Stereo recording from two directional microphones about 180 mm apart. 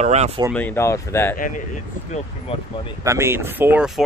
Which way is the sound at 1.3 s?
45° left (ahead or behind).